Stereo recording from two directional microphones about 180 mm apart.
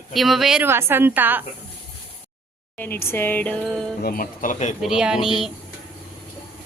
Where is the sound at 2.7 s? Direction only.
10° left (ahead or behind).